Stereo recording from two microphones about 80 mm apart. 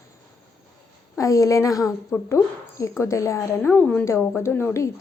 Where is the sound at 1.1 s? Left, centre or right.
Left.